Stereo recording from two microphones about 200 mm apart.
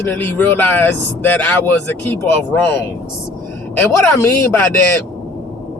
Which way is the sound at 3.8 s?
10° left (ahead or behind).